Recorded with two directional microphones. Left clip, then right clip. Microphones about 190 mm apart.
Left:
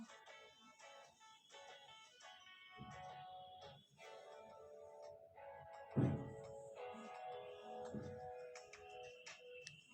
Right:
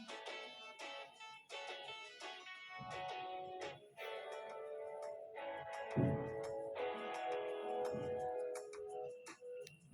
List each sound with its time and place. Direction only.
0.1 s music: 35° right (ahead or behind)
1.5 s music: 35° right (ahead or behind)